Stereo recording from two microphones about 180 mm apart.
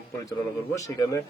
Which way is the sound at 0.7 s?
20° left (ahead or behind).